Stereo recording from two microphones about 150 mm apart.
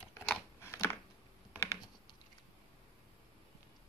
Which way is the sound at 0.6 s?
15° left (ahead or behind).